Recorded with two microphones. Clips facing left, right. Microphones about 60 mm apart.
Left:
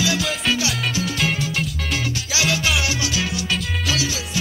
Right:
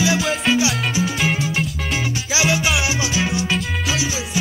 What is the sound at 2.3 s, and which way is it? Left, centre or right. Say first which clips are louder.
Music: right 2 dB; right.